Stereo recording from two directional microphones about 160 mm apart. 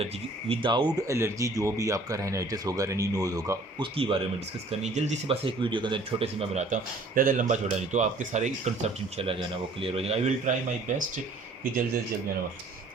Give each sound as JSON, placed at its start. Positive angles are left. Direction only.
{"t": 0.0, "sound": "speech", "side_deg": -35}
{"t": 3.9, "sound": "speech", "side_deg": -35}
{"t": 4.8, "sound": "speech", "side_deg": -45}
{"t": 7.2, "sound": "speech", "side_deg": -55}